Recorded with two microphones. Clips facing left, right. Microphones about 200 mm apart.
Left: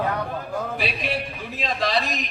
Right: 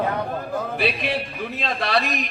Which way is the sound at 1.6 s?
60° right (ahead or behind).